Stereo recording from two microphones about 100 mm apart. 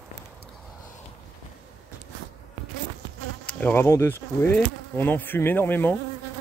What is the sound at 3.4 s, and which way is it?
Bee, 20° left (ahead or behind).